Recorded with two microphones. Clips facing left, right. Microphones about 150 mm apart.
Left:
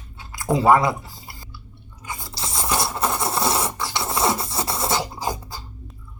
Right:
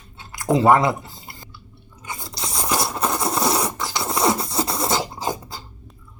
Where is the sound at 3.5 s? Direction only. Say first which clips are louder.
Right 1 dB; 15° right (ahead or behind).